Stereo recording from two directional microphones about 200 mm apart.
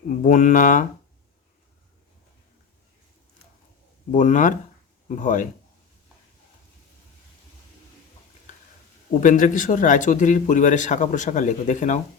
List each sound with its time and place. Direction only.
0.1 s speech: 40° left (ahead or behind)
4.1 s speech: 40° left (ahead or behind)
9.2 s speech: 40° left (ahead or behind)